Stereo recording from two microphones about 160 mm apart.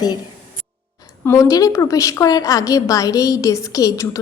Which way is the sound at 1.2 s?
20° left (ahead or behind).